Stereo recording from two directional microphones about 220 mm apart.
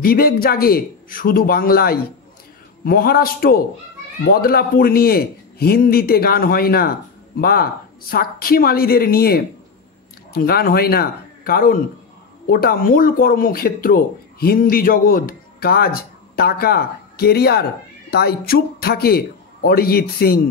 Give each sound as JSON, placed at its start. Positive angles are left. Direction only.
{"t": 0.0, "sound": "speech", "side_deg": 40}